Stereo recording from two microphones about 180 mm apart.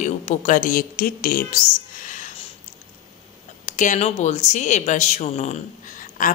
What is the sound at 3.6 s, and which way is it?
A woman's voice, 45° left (ahead or behind).